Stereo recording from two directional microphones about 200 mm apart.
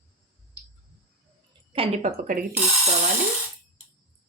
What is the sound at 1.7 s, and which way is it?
Speech, 30° right (ahead or behind).